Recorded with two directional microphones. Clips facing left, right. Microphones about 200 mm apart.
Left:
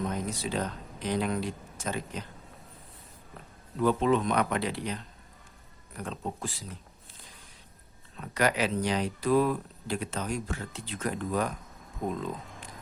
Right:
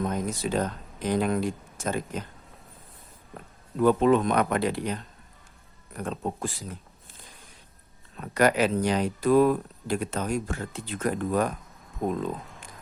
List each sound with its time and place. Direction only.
0.1 s speech: 50° right (ahead or behind)
3.8 s speech: 50° right (ahead or behind)
6.0 s speech: 50° right (ahead or behind)
8.2 s speech: 50° right (ahead or behind)